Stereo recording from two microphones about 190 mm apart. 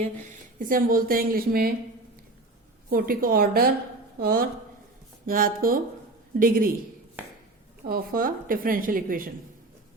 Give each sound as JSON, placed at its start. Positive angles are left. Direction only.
{"t": 0.0, "sound": "speech", "side_deg": -40}
{"t": 2.9, "sound": "speech", "side_deg": -50}
{"t": 7.9, "sound": "speech", "side_deg": -50}